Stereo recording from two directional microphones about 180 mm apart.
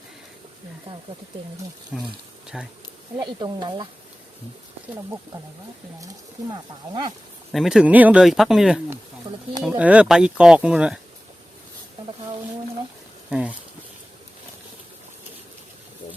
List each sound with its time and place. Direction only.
0.9 s speech: 30° right (ahead or behind)
1.9 s speech: centre (ahead or behind)
3.2 s speech: 25° right (ahead or behind)
6.0 s speech: 20° right (ahead or behind)
7.5 s speech: centre (ahead or behind)